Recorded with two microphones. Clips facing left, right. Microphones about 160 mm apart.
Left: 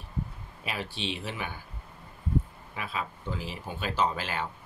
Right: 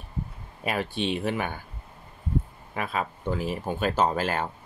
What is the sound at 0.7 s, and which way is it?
Speech, 50° right (ahead or behind).